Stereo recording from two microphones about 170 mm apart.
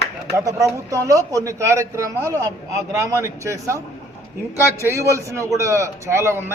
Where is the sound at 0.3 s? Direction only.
20° right (ahead or behind).